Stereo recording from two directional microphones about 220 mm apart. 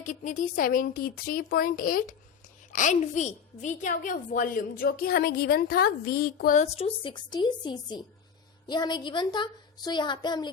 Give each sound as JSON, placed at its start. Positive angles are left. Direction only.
{"t": 0.0, "sound": "a child's voice", "side_deg": 35}